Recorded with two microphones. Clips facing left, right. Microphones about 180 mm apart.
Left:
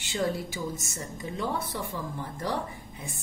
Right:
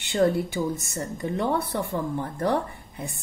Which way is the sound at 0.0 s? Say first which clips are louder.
Right 7 dB; 60° right (ahead or behind).